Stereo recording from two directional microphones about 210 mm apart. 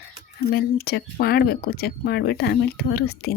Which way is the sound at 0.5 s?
50° left (ahead or behind).